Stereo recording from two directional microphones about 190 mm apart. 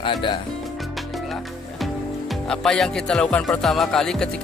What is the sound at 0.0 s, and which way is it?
Speech, 25° left (ahead or behind).